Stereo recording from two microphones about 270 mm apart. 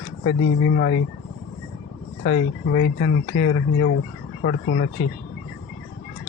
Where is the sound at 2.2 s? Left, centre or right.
Left.